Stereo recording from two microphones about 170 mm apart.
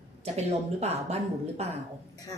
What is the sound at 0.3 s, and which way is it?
Speech, 40° right (ahead or behind).